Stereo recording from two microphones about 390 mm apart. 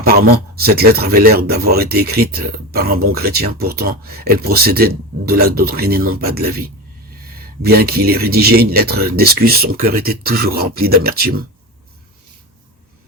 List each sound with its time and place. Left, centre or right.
0.1 s speech: right
7.6 s speech: right